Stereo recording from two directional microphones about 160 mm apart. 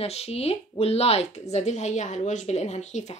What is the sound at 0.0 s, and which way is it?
A woman's voice, 40° left (ahead or behind).